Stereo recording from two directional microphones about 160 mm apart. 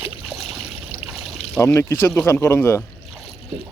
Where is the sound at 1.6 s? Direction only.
15° left (ahead or behind).